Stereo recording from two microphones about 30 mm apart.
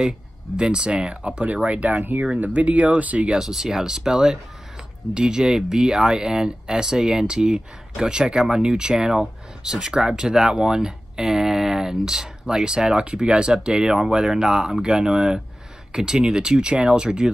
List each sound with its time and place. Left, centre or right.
0.6 s speech: right
1.7 s speech: right
3.3 s speech: centre
8.9 s speech: centre